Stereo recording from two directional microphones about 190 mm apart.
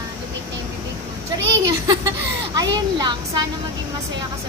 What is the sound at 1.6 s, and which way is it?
Speech, 20° right (ahead or behind).